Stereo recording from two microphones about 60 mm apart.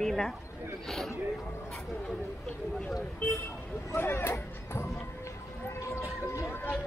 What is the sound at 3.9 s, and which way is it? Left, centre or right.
Speech, left.